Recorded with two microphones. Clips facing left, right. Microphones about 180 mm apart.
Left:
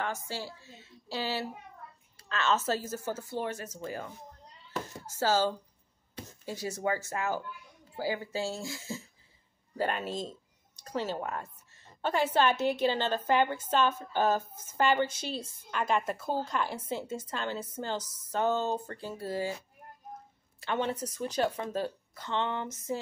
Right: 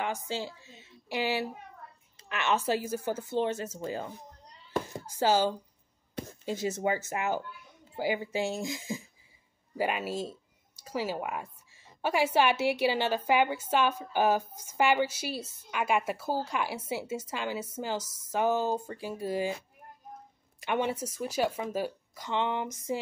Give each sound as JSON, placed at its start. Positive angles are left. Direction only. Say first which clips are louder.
{"t": 0.0, "sound": "a woman's voice", "louder": "right 2 dB", "side_deg": -15}
{"t": 20.6, "sound": "a woman's voice", "louder": "right 2 dB", "side_deg": -15}